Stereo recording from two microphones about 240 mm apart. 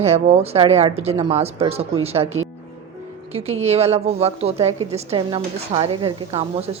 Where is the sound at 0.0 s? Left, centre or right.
Right.